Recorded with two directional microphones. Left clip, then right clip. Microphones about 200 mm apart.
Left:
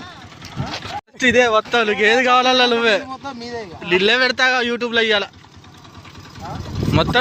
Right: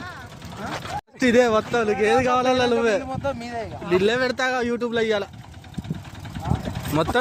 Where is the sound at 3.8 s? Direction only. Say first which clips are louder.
Left 5 dB; centre (ahead or behind).